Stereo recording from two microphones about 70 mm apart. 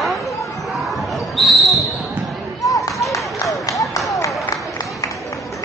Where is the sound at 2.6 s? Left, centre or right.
Left.